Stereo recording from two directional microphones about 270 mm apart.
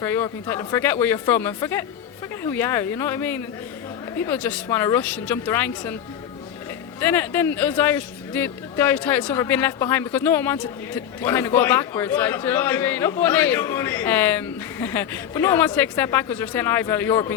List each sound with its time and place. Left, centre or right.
0.0 s a man's voice: centre
7.0 s a man's voice: centre